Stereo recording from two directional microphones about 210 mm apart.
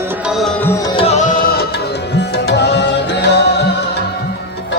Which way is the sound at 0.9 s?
30° left (ahead or behind).